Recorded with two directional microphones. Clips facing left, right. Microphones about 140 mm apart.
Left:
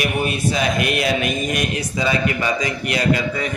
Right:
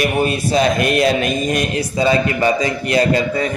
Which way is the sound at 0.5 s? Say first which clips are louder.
Right 8 dB; 35° right (ahead or behind).